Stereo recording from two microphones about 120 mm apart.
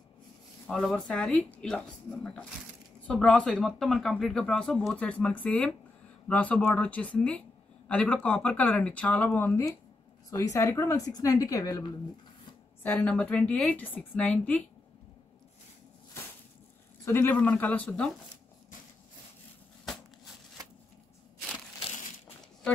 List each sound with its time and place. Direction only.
0.7 s speech: 5° left (ahead or behind); by 11.8 s 30° left (ahead or behind)
12.8 s speech: 15° left (ahead or behind)
17.0 s speech: 20° left (ahead or behind)